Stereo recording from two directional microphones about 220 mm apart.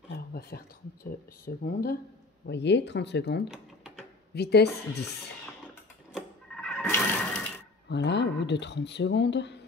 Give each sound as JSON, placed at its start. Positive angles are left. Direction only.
{"t": 0.3, "sound": "a sound", "side_deg": 45}
{"t": 1.4, "sound": "speech", "side_deg": 45}
{"t": 3.4, "sound": "typewriter", "side_deg": -5}
{"t": 4.3, "sound": "speech", "side_deg": 50}
{"t": 6.1, "sound": "sewing machine", "side_deg": 5}
{"t": 7.9, "sound": "speech", "side_deg": 50}